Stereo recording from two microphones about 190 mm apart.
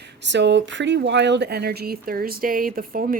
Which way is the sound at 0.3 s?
70° right (ahead or behind).